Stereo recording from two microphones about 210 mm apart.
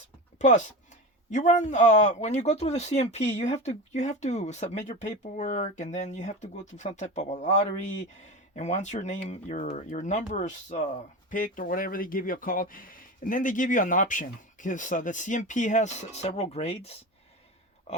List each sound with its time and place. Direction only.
0.3 s speech: 35° left (ahead or behind)